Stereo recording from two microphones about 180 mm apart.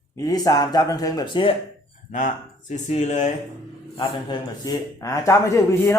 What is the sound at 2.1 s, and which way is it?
Speech, 45° left (ahead or behind).